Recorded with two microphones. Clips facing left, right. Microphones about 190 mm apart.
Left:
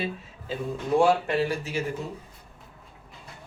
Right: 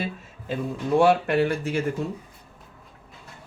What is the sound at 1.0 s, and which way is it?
Speech, 65° right (ahead or behind).